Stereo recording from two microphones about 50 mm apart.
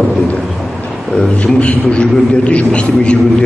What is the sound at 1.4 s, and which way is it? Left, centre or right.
A man's voice, left.